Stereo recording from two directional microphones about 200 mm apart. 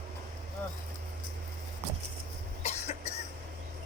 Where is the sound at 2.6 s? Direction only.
35° left (ahead or behind).